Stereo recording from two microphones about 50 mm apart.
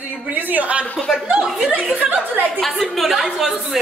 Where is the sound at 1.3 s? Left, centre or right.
Centre.